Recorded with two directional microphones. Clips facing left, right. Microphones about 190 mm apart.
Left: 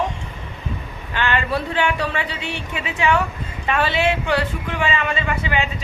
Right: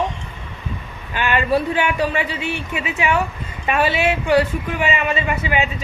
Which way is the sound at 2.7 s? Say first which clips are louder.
Left 1 dB; 15° right (ahead or behind).